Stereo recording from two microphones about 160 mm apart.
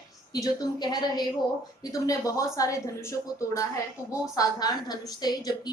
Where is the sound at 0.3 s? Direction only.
25° left (ahead or behind).